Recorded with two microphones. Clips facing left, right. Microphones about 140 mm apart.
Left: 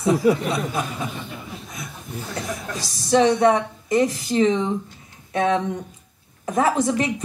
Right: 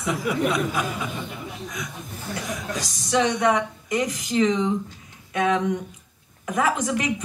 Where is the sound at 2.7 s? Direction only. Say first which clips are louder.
Left 5 dB; 35° left (ahead or behind).